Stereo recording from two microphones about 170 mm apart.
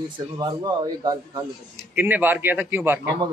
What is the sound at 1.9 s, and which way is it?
A man's voice, 10° right (ahead or behind).